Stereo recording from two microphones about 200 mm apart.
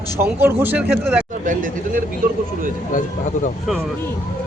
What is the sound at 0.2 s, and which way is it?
Speech, 10° right (ahead or behind).